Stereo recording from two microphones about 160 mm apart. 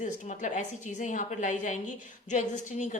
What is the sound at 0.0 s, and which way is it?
A woman's voice, 50° left (ahead or behind).